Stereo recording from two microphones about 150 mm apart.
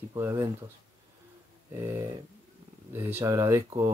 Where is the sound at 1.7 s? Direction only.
15° right (ahead or behind).